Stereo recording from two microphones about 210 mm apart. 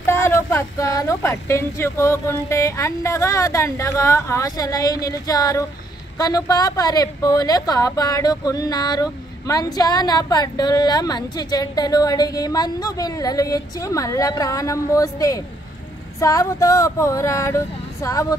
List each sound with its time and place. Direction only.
0.0 s a woman's voice: 10° left (ahead or behind)